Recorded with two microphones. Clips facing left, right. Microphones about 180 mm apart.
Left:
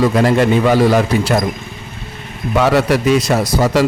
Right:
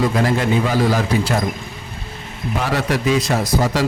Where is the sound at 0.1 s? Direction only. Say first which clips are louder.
Left 5 dB; 65° left (ahead or behind).